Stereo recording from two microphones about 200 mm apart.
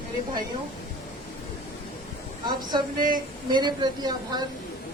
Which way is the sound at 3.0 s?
45° right (ahead or behind).